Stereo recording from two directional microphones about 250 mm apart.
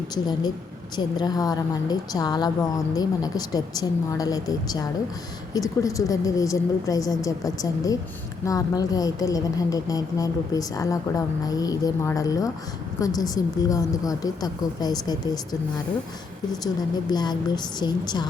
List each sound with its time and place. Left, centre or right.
0.1 s a woman's voice: centre
17.1 s a woman's voice: centre